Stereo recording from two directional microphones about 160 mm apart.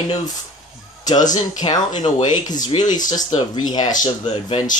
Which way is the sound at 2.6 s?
50° left (ahead or behind).